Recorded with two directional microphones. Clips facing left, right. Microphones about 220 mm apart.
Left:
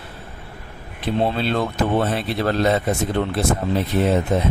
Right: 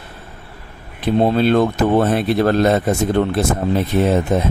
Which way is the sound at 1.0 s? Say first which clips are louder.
Right 6 dB; 45° right (ahead or behind).